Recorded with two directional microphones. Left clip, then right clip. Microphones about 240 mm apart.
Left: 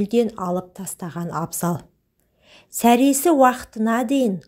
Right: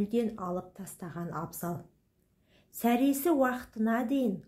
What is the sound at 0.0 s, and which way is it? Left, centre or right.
A woman's voice, left.